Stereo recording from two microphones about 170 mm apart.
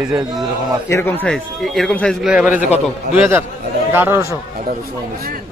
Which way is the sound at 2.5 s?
50° left (ahead or behind).